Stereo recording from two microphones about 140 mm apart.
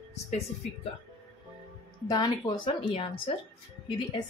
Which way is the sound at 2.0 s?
25° left (ahead or behind).